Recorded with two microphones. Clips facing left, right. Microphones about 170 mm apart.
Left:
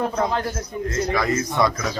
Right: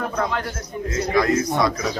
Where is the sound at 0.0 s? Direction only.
30° left (ahead or behind).